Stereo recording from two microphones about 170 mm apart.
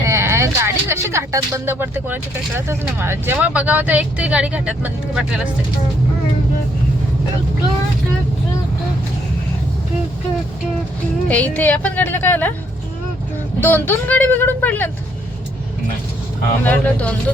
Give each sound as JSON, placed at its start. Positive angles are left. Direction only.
{"t": 0.0, "sound": "vehicle", "side_deg": -15}
{"t": 2.6, "sound": "speech", "side_deg": -15}
{"t": 11.3, "sound": "a woman's voice", "side_deg": 10}
{"t": 13.6, "sound": "a woman's voice", "side_deg": 10}
{"t": 16.6, "sound": "a woman's voice", "side_deg": 10}